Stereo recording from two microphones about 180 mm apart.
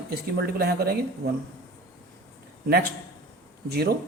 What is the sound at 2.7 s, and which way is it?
A man's voice, 60° right (ahead or behind).